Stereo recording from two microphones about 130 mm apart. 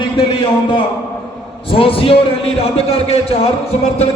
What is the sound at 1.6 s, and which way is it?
A man's voice, 45° left (ahead or behind).